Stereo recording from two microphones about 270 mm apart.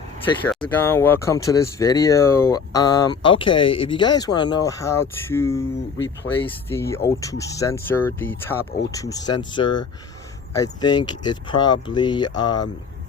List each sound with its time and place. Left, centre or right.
0.4 s speech: centre
6.7 s speech: centre